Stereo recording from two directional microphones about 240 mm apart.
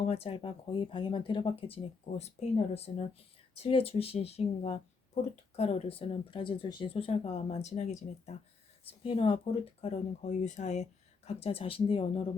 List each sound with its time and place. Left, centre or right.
0.1 s speech: left